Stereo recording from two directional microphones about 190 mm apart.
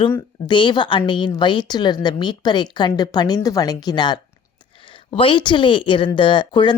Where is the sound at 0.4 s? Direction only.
25° left (ahead or behind).